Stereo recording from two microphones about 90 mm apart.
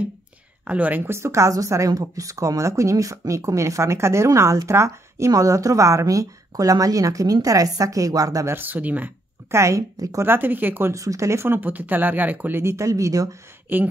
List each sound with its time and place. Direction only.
0.7 s speech: 15° right (ahead or behind); by 8.5 s 40° right (ahead or behind)
8.5 s speech: 20° right (ahead or behind)
9.5 s speech: 35° right (ahead or behind)
10.2 s speech: 25° right (ahead or behind)
10.9 s speech: 35° right (ahead or behind)
13.7 s speech: 20° right (ahead or behind)